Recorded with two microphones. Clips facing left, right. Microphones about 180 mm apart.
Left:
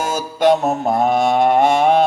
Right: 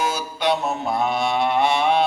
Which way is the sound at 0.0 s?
45° left (ahead or behind).